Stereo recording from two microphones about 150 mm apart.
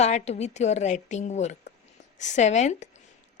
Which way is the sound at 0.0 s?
50° left (ahead or behind).